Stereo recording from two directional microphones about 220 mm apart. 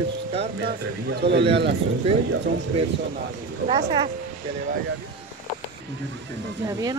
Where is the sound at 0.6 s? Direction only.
50° right (ahead or behind).